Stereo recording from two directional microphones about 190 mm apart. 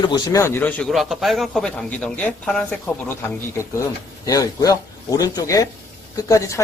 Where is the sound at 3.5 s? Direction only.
15° left (ahead or behind).